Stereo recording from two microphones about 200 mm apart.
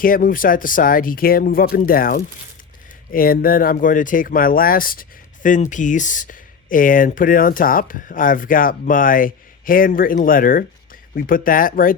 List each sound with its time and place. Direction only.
0.0 s speech: 45° left (ahead or behind)